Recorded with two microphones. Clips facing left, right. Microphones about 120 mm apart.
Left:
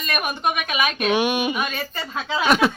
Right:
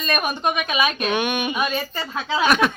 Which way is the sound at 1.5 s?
20° right (ahead or behind).